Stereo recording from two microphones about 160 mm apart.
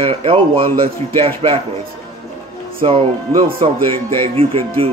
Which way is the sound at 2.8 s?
35° right (ahead or behind).